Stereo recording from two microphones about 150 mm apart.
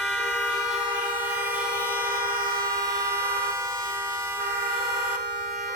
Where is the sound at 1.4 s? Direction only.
10° right (ahead or behind).